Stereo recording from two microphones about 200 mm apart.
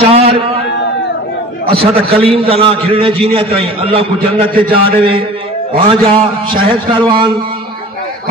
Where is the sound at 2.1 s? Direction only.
30° right (ahead or behind).